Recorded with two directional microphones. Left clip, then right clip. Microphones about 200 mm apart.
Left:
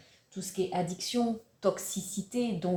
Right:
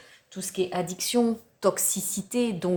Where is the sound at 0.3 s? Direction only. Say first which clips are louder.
Right 4 dB; 45° right (ahead or behind).